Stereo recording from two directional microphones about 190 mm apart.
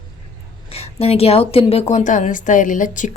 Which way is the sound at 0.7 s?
30° left (ahead or behind).